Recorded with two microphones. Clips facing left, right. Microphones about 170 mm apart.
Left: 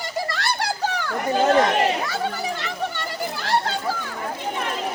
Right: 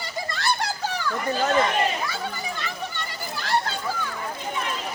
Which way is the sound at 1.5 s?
75° left (ahead or behind).